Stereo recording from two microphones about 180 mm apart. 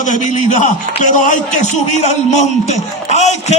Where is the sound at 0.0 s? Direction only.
45° left (ahead or behind).